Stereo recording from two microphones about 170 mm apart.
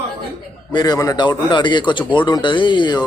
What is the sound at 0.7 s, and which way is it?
A man's voice, 20° left (ahead or behind).